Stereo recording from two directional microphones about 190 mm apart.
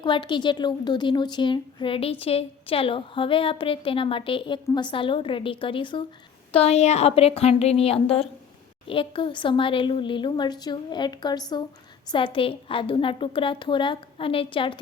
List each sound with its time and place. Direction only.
0.0 s a woman's voice: 25° left (ahead or behind)